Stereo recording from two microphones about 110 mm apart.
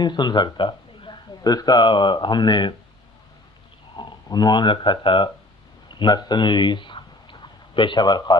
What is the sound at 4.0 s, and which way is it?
Speech, 40° left (ahead or behind).